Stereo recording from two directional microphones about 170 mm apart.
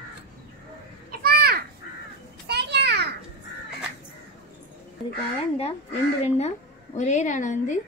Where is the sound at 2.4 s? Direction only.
75° right (ahead or behind).